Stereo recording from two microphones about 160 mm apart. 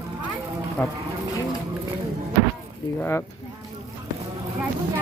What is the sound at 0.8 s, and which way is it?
Speech, 10° left (ahead or behind).